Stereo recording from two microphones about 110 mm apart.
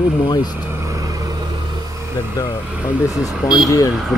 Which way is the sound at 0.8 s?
30° right (ahead or behind).